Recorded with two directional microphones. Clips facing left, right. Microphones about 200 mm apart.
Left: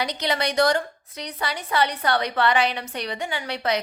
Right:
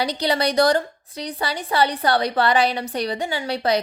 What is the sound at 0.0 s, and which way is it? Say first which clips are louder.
A woman's voice: right 4 dB; 35° right (ahead or behind).